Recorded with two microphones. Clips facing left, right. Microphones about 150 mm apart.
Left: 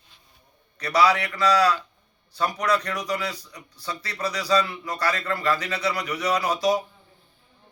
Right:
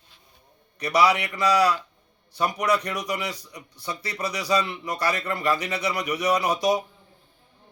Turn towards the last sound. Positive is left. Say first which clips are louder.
# even
turn(degrees=-20)  # may be behind; listen again after turning